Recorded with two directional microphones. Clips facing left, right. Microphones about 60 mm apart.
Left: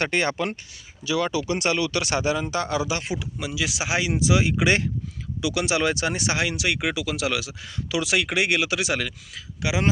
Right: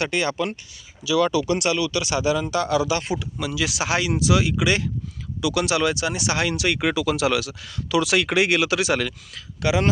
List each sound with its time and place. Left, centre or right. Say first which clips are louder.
0.0 s speech: even; left
1.2 s speech: right 4 dB; left
4.2 s speech: right 1 dB; left
5.9 s speech: even; left
6.3 s speech: right 2 dB; centre
7.4 s speech: right 1 dB; centre
8.0 s speech: right 1 dB; centre